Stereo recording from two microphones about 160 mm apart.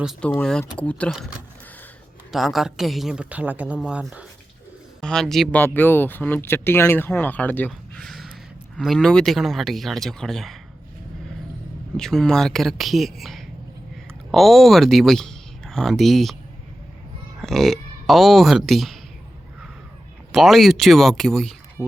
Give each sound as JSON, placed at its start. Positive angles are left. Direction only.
{"t": 0.2, "sound": "speech", "side_deg": 5}
{"t": 1.1, "sound": "a woman's voice", "side_deg": -5}
{"t": 4.9, "sound": "speech", "side_deg": 5}
{"t": 8.0, "sound": "a sound", "side_deg": 0}
{"t": 8.8, "sound": "a woman's voice", "side_deg": 0}
{"t": 11.9, "sound": "a woman's voice", "side_deg": 5}
{"t": 17.4, "sound": "speech", "side_deg": 0}
{"t": 20.3, "sound": "a woman's voice", "side_deg": 0}
{"t": 21.8, "sound": "speech", "side_deg": -20}